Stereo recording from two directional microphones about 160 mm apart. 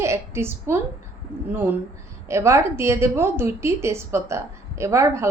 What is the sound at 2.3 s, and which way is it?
A woman's voice, 15° right (ahead or behind).